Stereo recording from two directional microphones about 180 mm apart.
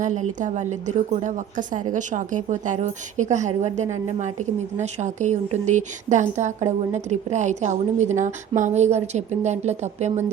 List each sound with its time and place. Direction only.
0.0 s a woman's voice: 45° right (ahead or behind)